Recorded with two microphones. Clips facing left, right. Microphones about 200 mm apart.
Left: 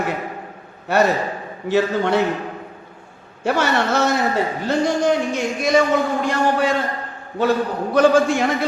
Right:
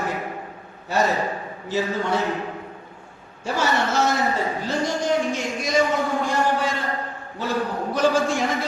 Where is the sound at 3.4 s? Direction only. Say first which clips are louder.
Left 4 dB; 65° left (ahead or behind).